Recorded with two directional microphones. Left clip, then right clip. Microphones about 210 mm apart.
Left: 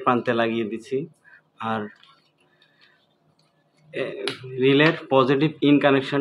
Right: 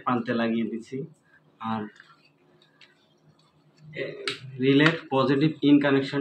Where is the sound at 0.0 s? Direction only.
40° left (ahead or behind).